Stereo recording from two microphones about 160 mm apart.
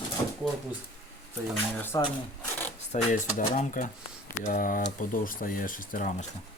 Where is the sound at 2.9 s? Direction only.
45° left (ahead or behind).